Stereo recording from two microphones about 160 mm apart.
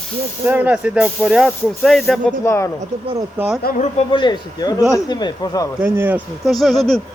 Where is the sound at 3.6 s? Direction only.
70° left (ahead or behind).